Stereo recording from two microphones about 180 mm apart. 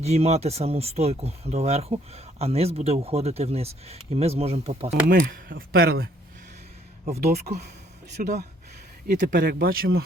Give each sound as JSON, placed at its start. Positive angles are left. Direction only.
{"t": 0.0, "sound": "speech", "side_deg": -35}
{"t": 5.2, "sound": "a man's voice", "side_deg": -55}
{"t": 7.2, "sound": "a man's voice", "side_deg": -60}